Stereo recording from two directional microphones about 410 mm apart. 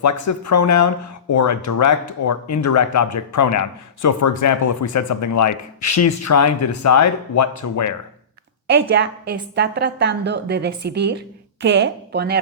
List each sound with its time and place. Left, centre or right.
0.0 s speech: left
8.6 s a woman's voice: right